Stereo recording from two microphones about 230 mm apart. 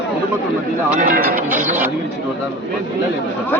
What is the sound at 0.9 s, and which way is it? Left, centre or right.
Speech, right.